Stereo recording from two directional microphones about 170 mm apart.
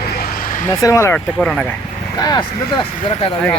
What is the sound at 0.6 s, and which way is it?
Speech, 20° left (ahead or behind).